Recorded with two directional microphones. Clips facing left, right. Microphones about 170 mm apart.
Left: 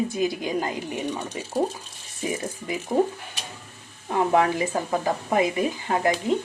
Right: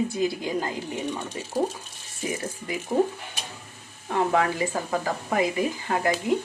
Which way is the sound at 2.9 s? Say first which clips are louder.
Left 1 dB; 15° left (ahead or behind).